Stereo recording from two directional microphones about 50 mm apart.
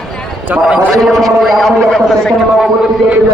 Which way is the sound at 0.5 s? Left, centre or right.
Right.